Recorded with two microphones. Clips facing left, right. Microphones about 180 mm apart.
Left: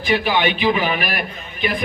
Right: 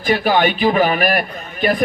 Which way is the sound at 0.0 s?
45° right (ahead or behind).